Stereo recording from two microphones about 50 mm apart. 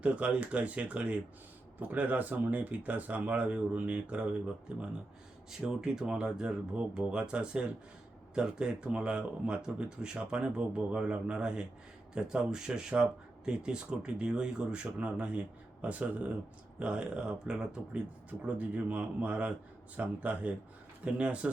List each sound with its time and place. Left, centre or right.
0.0 s speech: right
5.6 s speech: centre; by 16.3 s right
16.8 s speech: centre
18.3 s speech: right